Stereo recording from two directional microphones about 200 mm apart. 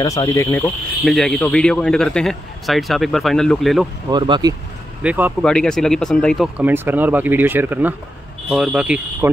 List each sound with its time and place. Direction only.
0.0 s speech: 20° left (ahead or behind)
1.0 s a man's voice: centre (ahead or behind)
4.1 s speech: 20° right (ahead or behind)
5.0 s speech: 10° right (ahead or behind)
5.4 s a man's voice: 5° left (ahead or behind)